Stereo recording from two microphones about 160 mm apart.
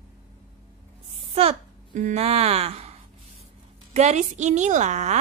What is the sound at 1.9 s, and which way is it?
A woman's voice, 45° right (ahead or behind).